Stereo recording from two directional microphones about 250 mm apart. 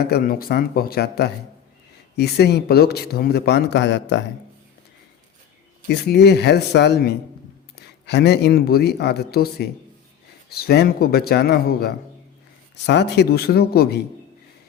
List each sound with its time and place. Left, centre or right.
0.0 s speech: left
5.9 s speech: left